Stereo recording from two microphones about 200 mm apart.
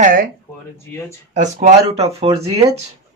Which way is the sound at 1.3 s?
35° right (ahead or behind).